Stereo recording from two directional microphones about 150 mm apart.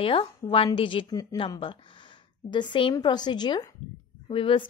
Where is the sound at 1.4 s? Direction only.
35° left (ahead or behind).